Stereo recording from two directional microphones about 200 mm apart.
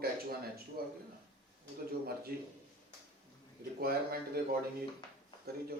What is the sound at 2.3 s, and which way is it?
Speech, 50° right (ahead or behind).